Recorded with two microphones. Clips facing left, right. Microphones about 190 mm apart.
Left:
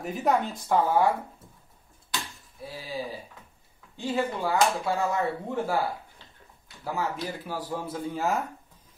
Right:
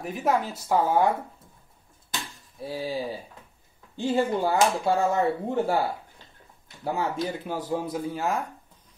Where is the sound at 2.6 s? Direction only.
30° right (ahead or behind).